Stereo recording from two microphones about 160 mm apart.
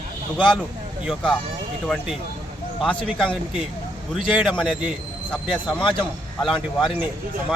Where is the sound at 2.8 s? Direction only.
Centre (ahead or behind).